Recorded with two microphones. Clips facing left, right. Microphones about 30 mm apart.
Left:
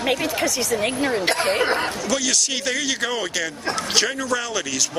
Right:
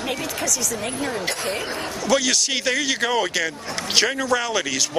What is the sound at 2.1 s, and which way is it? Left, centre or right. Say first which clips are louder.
Speech: right 5 dB; centre.